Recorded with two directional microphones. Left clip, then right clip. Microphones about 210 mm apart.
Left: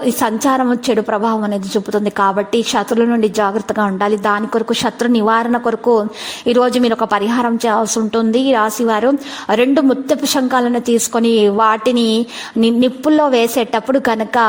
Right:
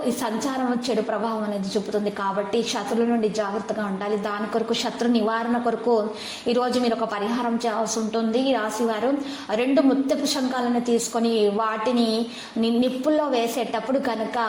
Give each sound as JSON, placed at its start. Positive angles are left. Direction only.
{"t": 0.2, "sound": "a woman's voice", "side_deg": 45}